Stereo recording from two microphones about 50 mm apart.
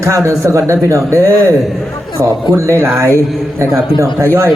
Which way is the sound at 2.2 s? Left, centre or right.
Right.